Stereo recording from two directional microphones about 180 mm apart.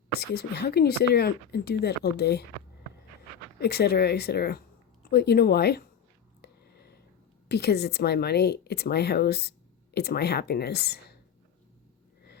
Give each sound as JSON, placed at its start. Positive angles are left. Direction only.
{"t": 0.2, "sound": "speech", "side_deg": 65}
{"t": 3.6, "sound": "speech", "side_deg": 60}
{"t": 6.4, "sound": "a sound", "side_deg": 65}
{"t": 7.4, "sound": "speech", "side_deg": 65}